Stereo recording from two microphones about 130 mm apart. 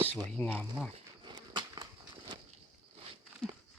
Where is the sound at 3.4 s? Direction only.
5° left (ahead or behind).